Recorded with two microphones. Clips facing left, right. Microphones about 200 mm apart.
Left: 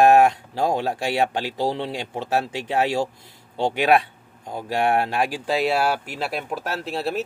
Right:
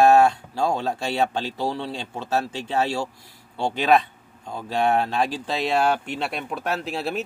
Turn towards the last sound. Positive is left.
turn(degrees=0)  # may be behind; listen again after turning